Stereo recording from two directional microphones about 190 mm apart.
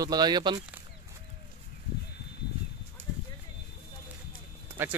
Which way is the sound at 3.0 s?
35° right (ahead or behind).